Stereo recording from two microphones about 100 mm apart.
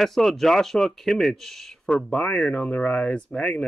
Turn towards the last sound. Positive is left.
turn(degrees=10)  # may be behind; listen again after turning